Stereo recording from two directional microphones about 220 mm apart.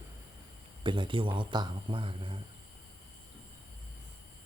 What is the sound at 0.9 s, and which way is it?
Speech, 20° right (ahead or behind).